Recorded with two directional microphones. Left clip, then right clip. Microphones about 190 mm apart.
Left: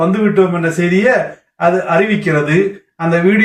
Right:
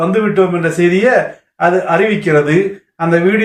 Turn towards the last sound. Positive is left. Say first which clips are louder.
# even
turn(degrees=-15)  # may be behind; listen again after turning